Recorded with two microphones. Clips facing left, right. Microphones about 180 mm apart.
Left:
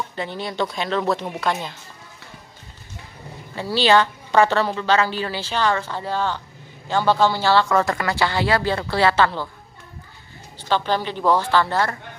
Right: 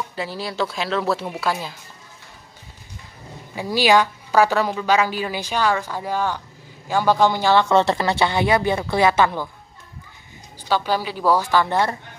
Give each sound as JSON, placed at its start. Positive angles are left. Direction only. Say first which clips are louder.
{"t": 0.1, "sound": "speech", "louder": "even", "side_deg": -5}
{"t": 3.5, "sound": "a woman's voice", "louder": "even", "side_deg": -10}
{"t": 10.7, "sound": "a woman's voice", "louder": "even", "side_deg": -10}